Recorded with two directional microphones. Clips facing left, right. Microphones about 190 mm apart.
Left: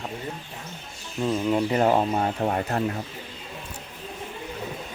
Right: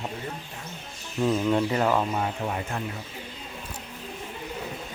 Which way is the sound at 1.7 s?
30° left (ahead or behind).